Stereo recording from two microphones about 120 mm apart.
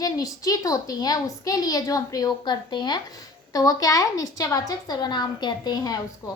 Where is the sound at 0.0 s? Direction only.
30° left (ahead or behind).